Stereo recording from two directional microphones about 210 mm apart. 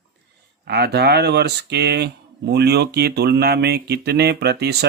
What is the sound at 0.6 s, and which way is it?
Speech, 50° right (ahead or behind).